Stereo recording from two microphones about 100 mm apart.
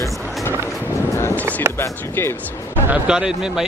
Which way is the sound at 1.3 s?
25° right (ahead or behind).